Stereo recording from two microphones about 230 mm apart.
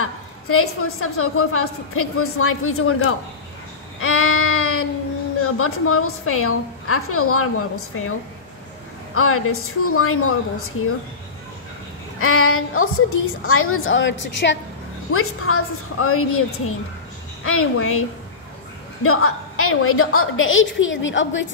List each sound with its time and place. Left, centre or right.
0.0 s a woman's voice: left
4.0 s child singing: left
5.4 s a woman's voice: left
12.2 s a woman's voice: left
15.1 s a woman's voice: left
19.0 s a woman's voice: left